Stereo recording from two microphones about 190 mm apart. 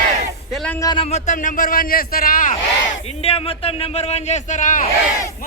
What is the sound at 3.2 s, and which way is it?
A man's voice, 30° left (ahead or behind).